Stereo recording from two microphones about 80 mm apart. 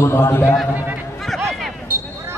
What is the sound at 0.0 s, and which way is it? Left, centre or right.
Speech, left.